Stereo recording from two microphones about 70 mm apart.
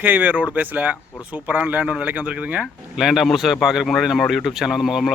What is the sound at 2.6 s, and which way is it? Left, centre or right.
Speech, centre.